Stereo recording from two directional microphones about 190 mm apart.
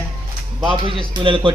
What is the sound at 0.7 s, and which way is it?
Speech, 25° right (ahead or behind).